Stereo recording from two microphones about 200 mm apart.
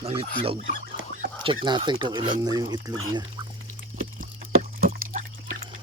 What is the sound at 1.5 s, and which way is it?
Speech, 25° right (ahead or behind).